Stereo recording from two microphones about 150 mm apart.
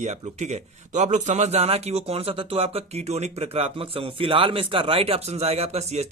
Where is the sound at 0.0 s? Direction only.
50° right (ahead or behind).